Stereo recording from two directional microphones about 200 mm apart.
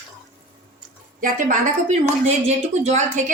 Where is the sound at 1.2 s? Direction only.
35° right (ahead or behind).